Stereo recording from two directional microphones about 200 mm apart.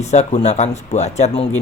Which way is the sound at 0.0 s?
35° left (ahead or behind).